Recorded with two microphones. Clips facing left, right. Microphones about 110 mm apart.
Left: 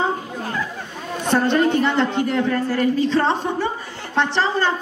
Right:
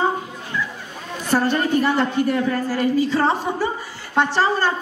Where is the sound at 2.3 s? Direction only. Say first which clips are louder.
Left 1 dB; 10° right (ahead or behind).